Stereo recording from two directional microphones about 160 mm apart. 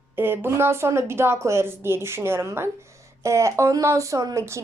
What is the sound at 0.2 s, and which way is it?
Speech, 15° right (ahead or behind).